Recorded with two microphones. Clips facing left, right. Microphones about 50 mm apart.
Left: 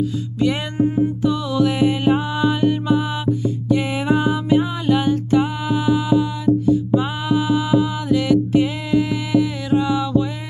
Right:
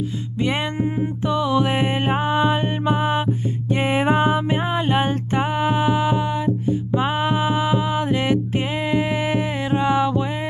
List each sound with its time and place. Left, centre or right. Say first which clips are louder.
0.4 s music: left 3 dB; right